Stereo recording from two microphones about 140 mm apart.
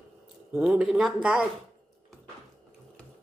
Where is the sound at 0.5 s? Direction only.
10° right (ahead or behind).